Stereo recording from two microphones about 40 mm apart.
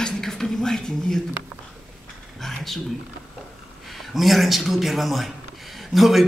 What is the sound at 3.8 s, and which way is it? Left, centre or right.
A man's voice, centre.